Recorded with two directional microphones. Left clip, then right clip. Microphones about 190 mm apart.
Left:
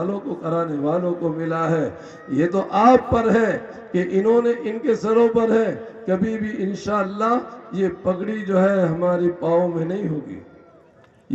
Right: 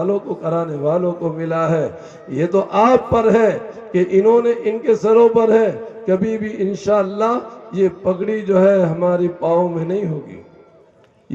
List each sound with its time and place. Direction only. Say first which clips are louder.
0.0 s a man's voice: right 6 dB; 50° right (ahead or behind)